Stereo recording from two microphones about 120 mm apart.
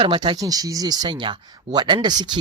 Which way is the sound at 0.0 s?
45° right (ahead or behind).